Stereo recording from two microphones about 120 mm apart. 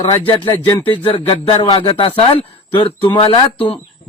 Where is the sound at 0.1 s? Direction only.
40° left (ahead or behind).